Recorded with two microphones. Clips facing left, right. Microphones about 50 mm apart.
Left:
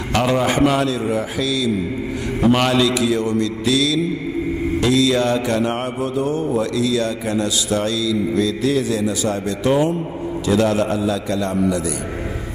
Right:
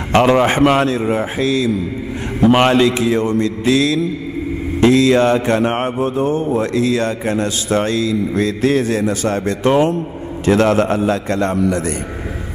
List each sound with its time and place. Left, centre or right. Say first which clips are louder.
0.1 s mantra: right 6 dB; right
10.4 s a man's voice: right 4 dB; right